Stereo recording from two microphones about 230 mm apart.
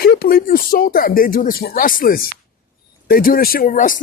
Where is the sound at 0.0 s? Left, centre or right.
Left.